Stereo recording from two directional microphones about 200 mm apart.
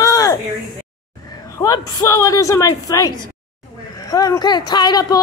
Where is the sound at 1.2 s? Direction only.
20° left (ahead or behind).